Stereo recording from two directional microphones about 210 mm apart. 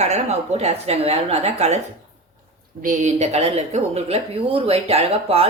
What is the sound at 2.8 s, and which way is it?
A woman's voice, 35° right (ahead or behind).